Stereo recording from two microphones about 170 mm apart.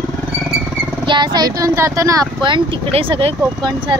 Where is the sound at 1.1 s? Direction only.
25° right (ahead or behind).